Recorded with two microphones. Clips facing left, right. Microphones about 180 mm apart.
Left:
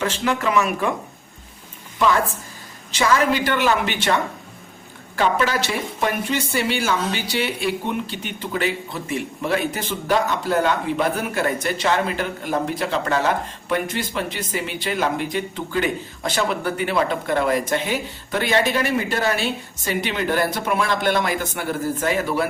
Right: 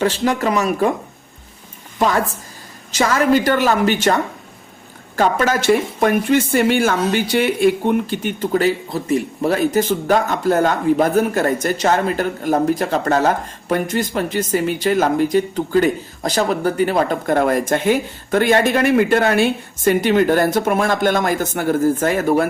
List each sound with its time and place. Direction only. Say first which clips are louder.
0.0 s speech: right 5 dB; 35° right (ahead or behind)
2.9 s speech: right 4 dB; 45° right (ahead or behind)